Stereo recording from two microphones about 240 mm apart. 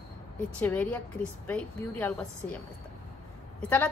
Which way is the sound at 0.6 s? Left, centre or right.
Centre.